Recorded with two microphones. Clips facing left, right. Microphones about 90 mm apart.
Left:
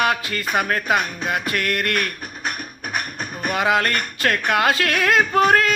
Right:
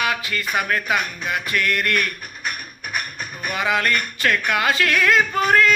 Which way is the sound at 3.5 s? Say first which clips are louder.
Left 2 dB; 50° left (ahead or behind).